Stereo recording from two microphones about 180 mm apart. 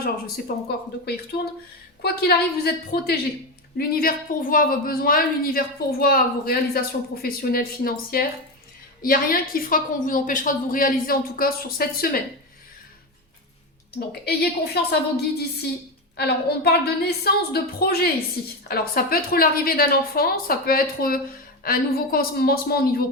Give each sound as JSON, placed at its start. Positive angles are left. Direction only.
{"t": 0.0, "sound": "a woman's voice", "side_deg": 55}
{"t": 2.0, "sound": "a woman's voice", "side_deg": 60}
{"t": 14.3, "sound": "a woman's voice", "side_deg": 60}